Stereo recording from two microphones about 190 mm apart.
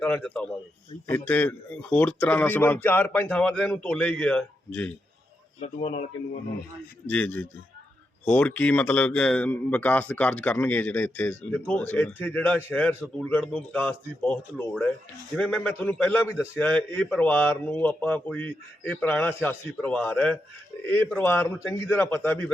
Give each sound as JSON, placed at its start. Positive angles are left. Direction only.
{"t": 0.0, "sound": "a man's voice", "side_deg": 5}
{"t": 5.5, "sound": "speech", "side_deg": 35}
{"t": 7.1, "sound": "a man's voice", "side_deg": 10}